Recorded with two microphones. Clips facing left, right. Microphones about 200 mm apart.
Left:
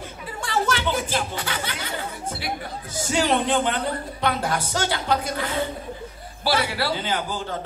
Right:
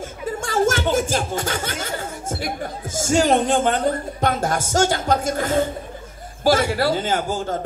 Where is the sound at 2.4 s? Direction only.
45° right (ahead or behind).